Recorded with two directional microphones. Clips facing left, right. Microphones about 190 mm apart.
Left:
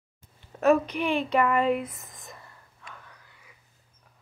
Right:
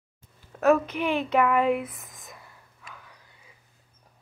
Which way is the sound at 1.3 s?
10° right (ahead or behind).